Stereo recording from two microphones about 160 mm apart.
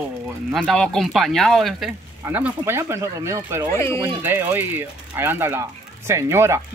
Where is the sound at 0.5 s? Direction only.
Centre (ahead or behind).